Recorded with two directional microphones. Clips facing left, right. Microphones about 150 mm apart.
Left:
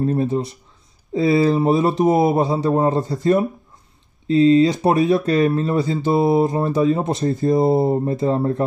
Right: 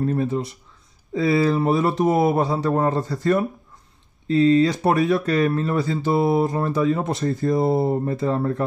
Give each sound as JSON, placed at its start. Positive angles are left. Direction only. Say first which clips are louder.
{"t": 0.0, "sound": "speech", "louder": "left 3 dB", "side_deg": 30}